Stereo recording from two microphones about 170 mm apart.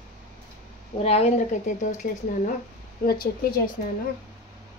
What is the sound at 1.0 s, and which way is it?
Speech, 40° left (ahead or behind).